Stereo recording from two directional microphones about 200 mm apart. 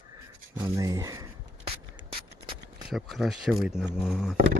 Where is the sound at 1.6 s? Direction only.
30° right (ahead or behind).